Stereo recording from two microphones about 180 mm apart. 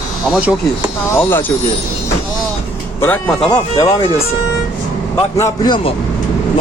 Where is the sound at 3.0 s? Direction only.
10° left (ahead or behind).